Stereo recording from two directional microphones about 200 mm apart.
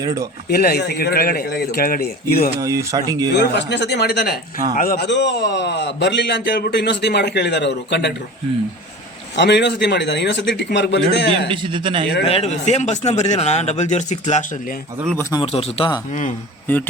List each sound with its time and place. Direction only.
0.0 s speech: 15° right (ahead or behind)
0.4 s speech: 50° left (ahead or behind)
2.6 s speech: 15° right (ahead or behind)
3.3 s a man's voice: 60° left (ahead or behind)
9.3 s a man's voice: 60° left (ahead or behind)
11.4 s a man's voice: 25° right (ahead or behind)
12.2 s speech: 30° left (ahead or behind)
15.0 s speech: 10° left (ahead or behind)
15.3 s speech: 25° left (ahead or behind)